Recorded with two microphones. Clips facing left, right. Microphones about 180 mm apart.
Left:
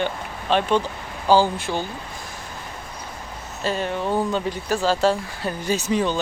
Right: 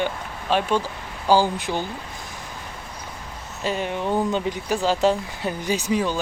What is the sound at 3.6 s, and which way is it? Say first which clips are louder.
Speech: left 1 dB; 15° right (ahead or behind).